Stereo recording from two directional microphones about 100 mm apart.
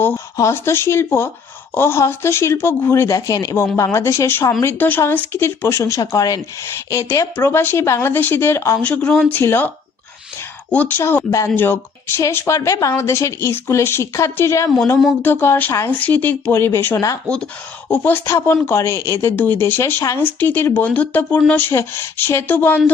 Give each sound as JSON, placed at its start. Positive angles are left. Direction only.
{"t": 0.3, "sound": "speech", "side_deg": 25}
{"t": 8.8, "sound": "speech", "side_deg": 10}
{"t": 17.2, "sound": "speech", "side_deg": 10}